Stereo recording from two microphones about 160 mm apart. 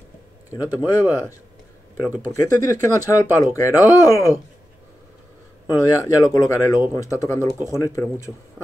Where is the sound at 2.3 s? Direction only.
20° left (ahead or behind).